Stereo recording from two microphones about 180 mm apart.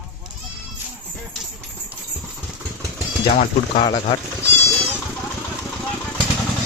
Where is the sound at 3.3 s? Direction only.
50° left (ahead or behind).